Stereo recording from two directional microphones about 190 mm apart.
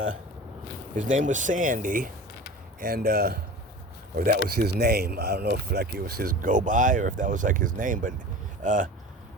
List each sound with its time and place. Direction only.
1.1 s speech: 40° right (ahead or behind)